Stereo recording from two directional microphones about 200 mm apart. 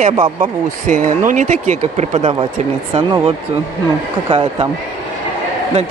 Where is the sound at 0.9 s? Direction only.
40° right (ahead or behind).